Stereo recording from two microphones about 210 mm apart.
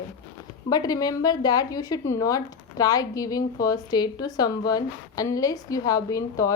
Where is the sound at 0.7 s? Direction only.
20° left (ahead or behind).